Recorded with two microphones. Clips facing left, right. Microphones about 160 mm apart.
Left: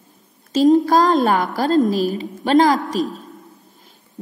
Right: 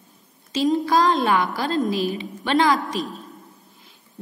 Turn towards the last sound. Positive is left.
turn(degrees=40)  # may be behind; listen again after turning